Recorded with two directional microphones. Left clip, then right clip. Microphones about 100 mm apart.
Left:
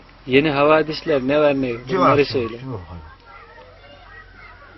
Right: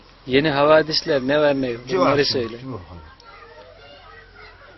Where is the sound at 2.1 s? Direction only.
40° right (ahead or behind).